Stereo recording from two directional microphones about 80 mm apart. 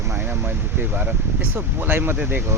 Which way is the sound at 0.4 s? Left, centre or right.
Right.